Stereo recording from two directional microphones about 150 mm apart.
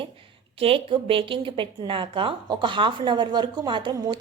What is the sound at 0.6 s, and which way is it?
A woman's voice, 35° right (ahead or behind).